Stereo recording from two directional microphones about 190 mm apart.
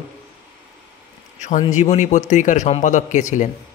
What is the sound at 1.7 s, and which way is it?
A man's voice, 35° left (ahead or behind).